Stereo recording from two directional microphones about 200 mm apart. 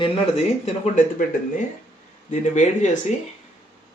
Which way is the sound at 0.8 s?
40° left (ahead or behind).